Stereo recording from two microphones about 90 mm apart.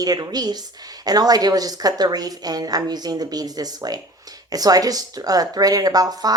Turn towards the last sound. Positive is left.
turn(degrees=-45)  # may be behind; listen again after turning